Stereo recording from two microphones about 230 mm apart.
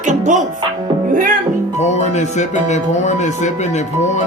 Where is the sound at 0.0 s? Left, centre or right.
Right.